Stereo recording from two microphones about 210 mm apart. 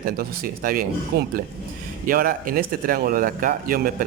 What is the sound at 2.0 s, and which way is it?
Speech, 45° right (ahead or behind).